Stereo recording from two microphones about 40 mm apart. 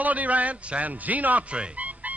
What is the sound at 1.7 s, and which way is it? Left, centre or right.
Music, right.